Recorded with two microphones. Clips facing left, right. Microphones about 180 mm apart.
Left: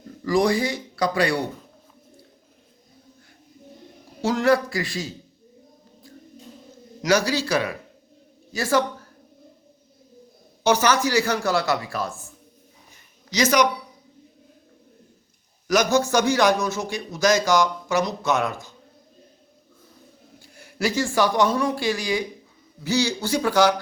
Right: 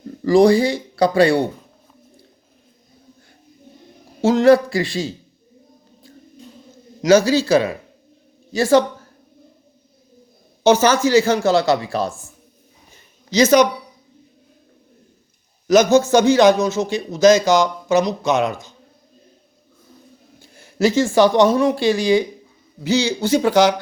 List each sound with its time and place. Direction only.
0.3 s a man's voice: 30° right (ahead or behind)
4.2 s a man's voice: 25° right (ahead or behind)
7.0 s a man's voice: 25° right (ahead or behind)
10.6 s a man's voice: 25° right (ahead or behind)
12.9 s a sound: 25° right (ahead or behind)
15.6 s a man's voice: 25° right (ahead or behind)
20.4 s a man's voice: 25° right (ahead or behind)